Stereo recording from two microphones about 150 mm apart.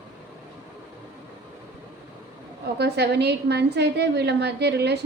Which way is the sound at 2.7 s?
90° right.